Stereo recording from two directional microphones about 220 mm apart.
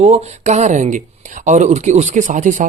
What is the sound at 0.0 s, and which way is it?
Speech, 30° right (ahead or behind).